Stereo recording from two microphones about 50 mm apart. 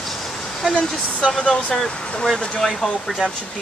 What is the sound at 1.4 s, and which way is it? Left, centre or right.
Speech, left.